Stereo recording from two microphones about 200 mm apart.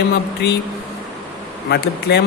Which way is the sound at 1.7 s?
55° left (ahead or behind).